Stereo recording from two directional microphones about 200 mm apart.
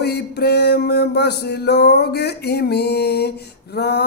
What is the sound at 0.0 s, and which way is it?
A man's voice, 55° left (ahead or behind).